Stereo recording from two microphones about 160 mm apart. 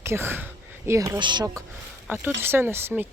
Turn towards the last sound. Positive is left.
turn(degrees=-15)  # may be behind; listen again after turning